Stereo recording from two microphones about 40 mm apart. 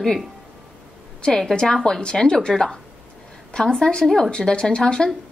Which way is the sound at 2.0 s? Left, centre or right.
Centre.